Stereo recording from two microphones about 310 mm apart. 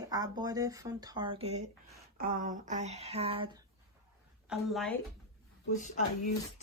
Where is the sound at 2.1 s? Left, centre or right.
Right.